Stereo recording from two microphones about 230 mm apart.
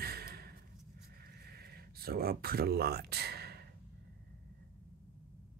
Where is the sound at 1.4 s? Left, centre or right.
Right.